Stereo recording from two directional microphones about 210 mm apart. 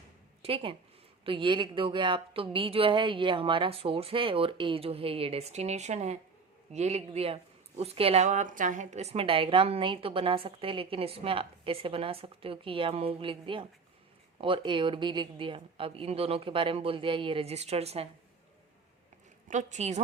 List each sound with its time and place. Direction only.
0.4 s a woman's voice: 25° right (ahead or behind)
19.5 s speech: 35° right (ahead or behind)